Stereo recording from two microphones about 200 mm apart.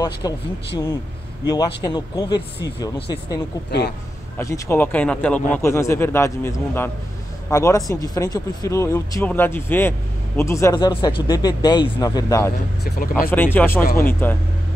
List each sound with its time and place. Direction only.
0.2 s speech: 20° left (ahead or behind)
1.4 s speech: 20° left (ahead or behind)
4.4 s speech: 15° left (ahead or behind)